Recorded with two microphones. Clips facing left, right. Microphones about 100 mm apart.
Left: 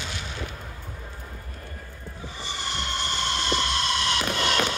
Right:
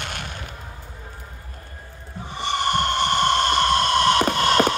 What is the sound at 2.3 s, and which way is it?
Vehicle, 60° right (ahead or behind).